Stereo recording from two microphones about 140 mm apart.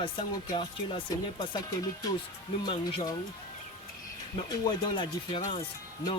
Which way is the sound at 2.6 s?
40° left (ahead or behind).